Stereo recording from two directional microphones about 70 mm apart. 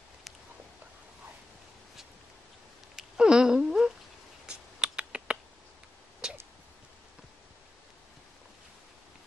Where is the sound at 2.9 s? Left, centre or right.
Centre.